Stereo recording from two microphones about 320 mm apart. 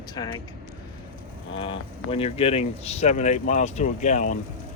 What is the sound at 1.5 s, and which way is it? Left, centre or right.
Speech, centre.